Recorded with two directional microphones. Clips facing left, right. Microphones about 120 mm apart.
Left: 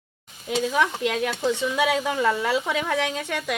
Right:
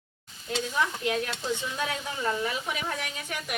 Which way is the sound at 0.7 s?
80° left.